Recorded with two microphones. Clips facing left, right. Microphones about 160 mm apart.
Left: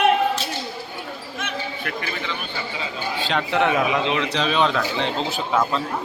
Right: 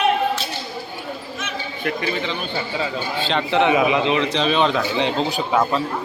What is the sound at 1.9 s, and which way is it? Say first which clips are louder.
Speech: right 10 dB; 25° right (ahead or behind).